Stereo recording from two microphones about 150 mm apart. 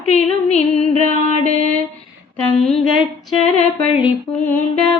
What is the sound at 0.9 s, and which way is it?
Mantra, 55° right (ahead or behind).